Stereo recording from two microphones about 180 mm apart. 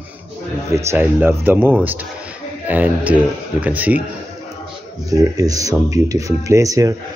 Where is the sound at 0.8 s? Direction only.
10° right (ahead or behind).